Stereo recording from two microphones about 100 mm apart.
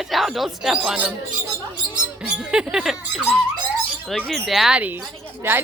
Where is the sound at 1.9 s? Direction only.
5° right (ahead or behind).